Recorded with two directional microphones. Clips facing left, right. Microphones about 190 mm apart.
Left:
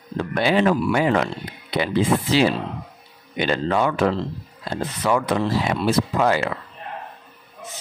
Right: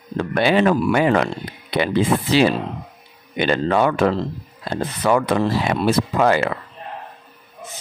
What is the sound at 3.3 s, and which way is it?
Speech, 65° right (ahead or behind).